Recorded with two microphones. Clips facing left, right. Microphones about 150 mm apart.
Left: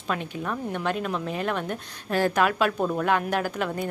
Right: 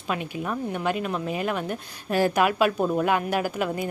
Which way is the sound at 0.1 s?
10° right (ahead or behind).